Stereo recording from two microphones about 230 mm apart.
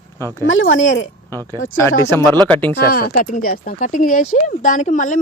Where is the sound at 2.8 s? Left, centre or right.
Left.